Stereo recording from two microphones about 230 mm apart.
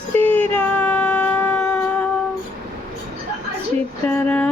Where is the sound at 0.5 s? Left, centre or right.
Centre.